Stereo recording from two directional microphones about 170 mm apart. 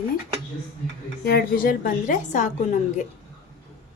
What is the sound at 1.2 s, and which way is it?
A woman's voice, 65° left (ahead or behind).